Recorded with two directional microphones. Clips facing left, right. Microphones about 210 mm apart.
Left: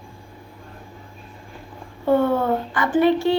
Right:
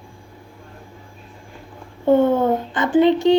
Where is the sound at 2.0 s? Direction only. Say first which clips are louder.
Right 3 dB; 20° right (ahead or behind).